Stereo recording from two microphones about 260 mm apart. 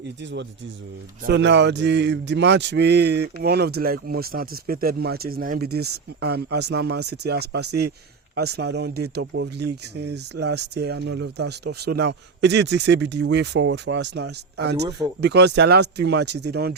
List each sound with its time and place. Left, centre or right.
1.2 s speech: right